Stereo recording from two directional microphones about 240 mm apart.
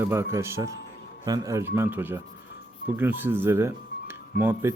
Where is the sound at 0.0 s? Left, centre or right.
Centre.